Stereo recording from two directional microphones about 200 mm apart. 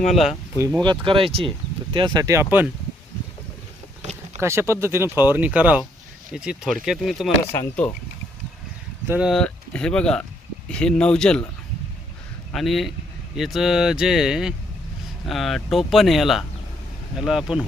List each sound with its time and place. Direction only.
1.0 s speech: 25° right (ahead or behind)
4.4 s speech: 15° right (ahead or behind)
7.5 s speech: 10° left (ahead or behind)
9.0 s speech: 5° right (ahead or behind)
12.5 s speech: centre (ahead or behind)